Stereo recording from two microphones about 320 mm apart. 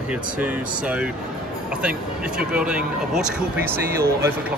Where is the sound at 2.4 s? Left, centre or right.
Centre.